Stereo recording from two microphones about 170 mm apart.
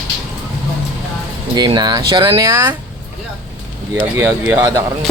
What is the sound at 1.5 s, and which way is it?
Speech, 25° right (ahead or behind).